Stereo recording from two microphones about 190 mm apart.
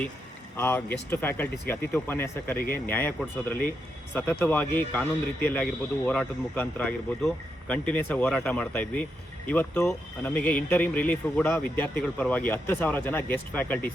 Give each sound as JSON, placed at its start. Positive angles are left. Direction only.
{"t": 0.5, "sound": "speech", "side_deg": 10}
{"t": 2.6, "sound": "speech", "side_deg": 50}
{"t": 2.8, "sound": "speech", "side_deg": 10}